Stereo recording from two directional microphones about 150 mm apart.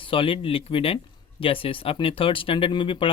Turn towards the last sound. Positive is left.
turn(degrees=35)  # may be behind; listen again after turning